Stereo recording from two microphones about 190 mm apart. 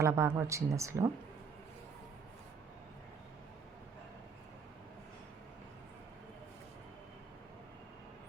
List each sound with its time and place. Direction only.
0.0 s speech: 15° right (ahead or behind)